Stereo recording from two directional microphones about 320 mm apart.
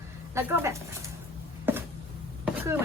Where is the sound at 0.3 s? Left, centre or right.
Centre.